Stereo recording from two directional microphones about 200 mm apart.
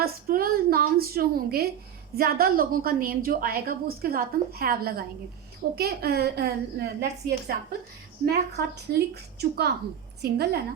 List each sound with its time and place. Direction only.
0.0 s a woman's voice: 50° right (ahead or behind)